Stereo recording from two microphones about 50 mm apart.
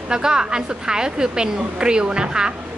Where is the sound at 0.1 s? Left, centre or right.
Centre.